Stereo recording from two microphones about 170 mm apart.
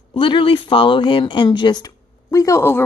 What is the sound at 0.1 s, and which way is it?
A woman's voice, 30° left (ahead or behind).